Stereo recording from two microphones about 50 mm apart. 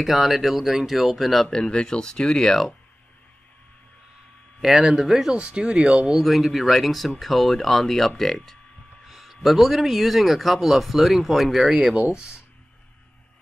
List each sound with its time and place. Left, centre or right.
0.0 s speech: centre
1.5 s speech: centre
4.6 s speech: centre
5.4 s speech: centre
6.1 s speech: centre